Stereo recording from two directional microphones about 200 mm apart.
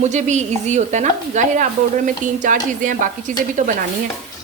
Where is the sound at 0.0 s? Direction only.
35° right (ahead or behind).